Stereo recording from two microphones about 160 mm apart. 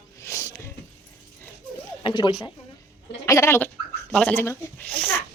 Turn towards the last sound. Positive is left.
turn(degrees=10)  # may be behind; listen again after turning